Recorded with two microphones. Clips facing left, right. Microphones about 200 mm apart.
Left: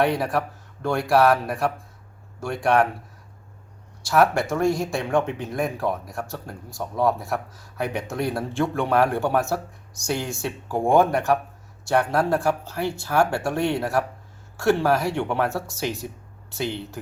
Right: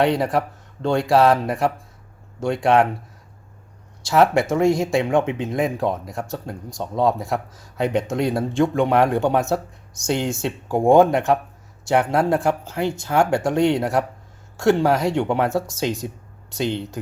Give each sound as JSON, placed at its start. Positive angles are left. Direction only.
{"t": 0.0, "sound": "speech", "side_deg": -20}
{"t": 4.1, "sound": "speech", "side_deg": -20}